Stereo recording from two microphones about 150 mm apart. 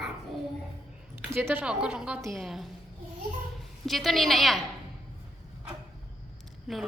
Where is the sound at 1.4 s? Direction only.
10° right (ahead or behind).